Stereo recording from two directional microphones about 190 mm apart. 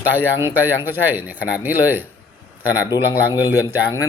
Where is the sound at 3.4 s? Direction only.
15° left (ahead or behind).